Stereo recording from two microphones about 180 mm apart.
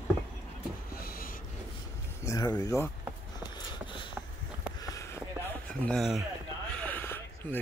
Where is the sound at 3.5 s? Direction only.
25° left (ahead or behind).